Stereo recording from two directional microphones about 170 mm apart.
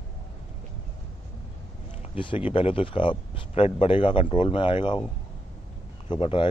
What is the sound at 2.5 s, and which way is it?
Speech, 30° left (ahead or behind).